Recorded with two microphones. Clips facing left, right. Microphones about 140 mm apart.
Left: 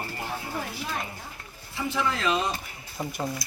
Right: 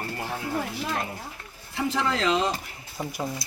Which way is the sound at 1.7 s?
75° right (ahead or behind).